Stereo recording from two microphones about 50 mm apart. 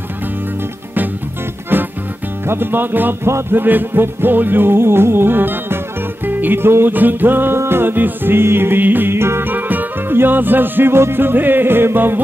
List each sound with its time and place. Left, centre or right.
1.7 s music: right
9.4 s music: right